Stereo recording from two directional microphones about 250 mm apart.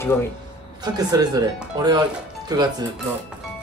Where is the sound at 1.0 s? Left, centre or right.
Centre.